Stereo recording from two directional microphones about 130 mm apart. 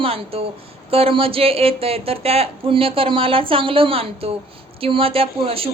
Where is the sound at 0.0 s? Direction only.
45° right (ahead or behind).